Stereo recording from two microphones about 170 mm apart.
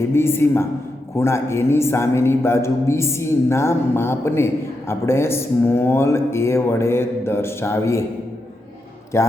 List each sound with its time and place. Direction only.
0.0 s a man's voice: 15° left (ahead or behind)
9.1 s a man's voice: 15° left (ahead or behind)